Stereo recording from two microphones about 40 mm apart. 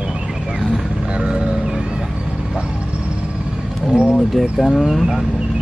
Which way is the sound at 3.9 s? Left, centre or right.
Centre.